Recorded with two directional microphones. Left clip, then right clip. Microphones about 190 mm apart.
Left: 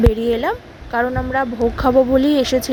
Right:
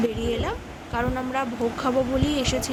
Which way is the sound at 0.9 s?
30° left (ahead or behind).